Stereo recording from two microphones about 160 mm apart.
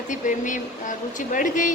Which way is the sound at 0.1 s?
55° left (ahead or behind).